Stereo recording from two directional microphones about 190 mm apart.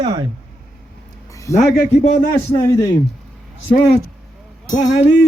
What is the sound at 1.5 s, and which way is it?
A man's voice, 15° left (ahead or behind).